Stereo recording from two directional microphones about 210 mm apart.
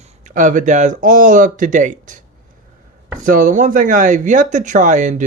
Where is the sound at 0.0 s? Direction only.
35° right (ahead or behind).